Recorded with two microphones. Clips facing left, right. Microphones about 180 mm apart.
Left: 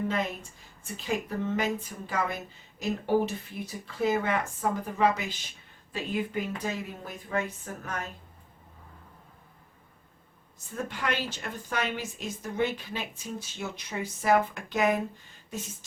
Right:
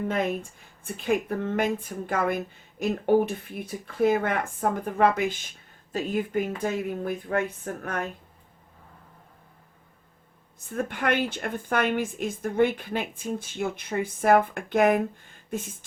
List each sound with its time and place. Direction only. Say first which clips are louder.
0.9 s speech: right 6 dB; 55° right (ahead or behind)
10.7 s a woman's voice: right 5 dB; 55° right (ahead or behind)